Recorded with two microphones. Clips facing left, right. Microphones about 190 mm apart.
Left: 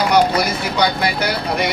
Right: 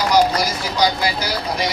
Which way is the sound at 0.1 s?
60° left (ahead or behind).